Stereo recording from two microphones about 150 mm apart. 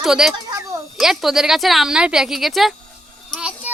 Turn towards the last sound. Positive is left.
turn(degrees=-5)  # may be behind; listen again after turning